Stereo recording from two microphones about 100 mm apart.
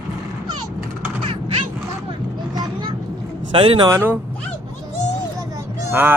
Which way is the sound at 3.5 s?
65° right (ahead or behind).